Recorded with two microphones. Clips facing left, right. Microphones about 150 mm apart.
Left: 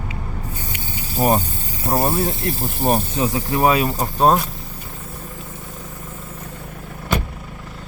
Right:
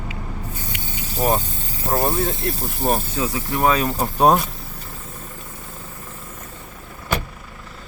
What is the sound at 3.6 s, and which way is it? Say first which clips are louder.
Speech: left 1 dB; 5° left (ahead or behind).